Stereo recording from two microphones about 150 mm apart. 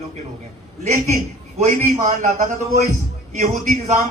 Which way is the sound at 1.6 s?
55° right (ahead or behind).